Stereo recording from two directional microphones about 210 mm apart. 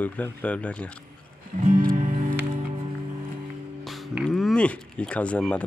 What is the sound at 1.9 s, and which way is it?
Music, 35° right (ahead or behind).